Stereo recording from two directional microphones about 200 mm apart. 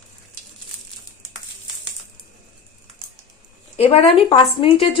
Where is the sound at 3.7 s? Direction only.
30° left (ahead or behind).